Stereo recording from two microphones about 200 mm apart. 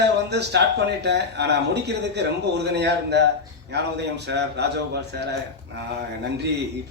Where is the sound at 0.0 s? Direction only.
55° right (ahead or behind).